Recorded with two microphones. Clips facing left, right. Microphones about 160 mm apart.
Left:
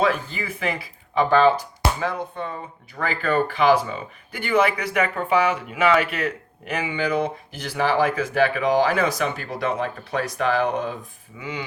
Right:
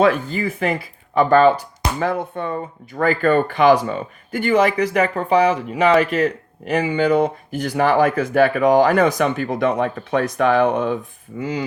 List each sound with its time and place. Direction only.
0.0 s speech: 55° right (ahead or behind)